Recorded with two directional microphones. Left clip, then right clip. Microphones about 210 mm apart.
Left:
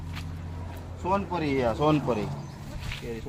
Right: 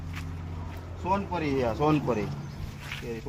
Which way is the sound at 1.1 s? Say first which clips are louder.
Left 1 dB; centre (ahead or behind).